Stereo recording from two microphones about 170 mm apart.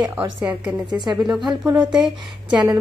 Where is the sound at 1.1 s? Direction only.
Centre (ahead or behind).